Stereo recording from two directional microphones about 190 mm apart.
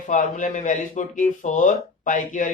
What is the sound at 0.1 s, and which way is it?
Speech, 40° left (ahead or behind).